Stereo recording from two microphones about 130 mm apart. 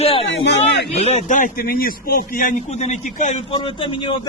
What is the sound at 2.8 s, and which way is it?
Speech, 65° left (ahead or behind).